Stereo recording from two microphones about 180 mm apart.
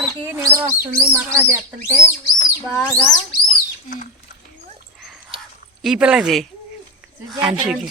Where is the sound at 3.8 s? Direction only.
45° left (ahead or behind).